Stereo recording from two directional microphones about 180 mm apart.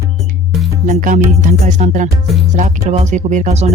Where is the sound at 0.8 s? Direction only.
45° right (ahead or behind).